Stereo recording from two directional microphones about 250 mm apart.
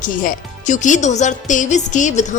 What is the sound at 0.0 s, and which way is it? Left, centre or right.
Speech, left.